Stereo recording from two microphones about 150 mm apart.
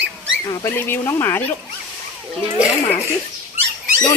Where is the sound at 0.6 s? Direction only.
15° left (ahead or behind).